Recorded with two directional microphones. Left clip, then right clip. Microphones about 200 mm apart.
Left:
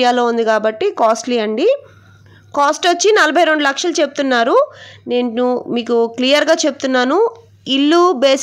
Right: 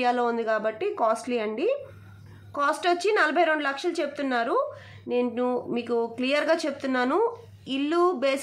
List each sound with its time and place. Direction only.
0.0 s a woman's voice: 35° left (ahead or behind)